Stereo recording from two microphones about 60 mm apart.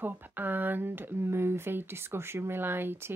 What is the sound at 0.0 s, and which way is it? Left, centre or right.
A woman's voice, right.